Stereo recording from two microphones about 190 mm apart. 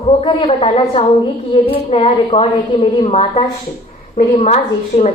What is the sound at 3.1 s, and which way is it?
A woman's voice, 30° left (ahead or behind).